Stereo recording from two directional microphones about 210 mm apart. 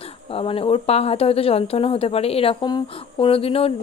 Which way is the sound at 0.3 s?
25° left (ahead or behind).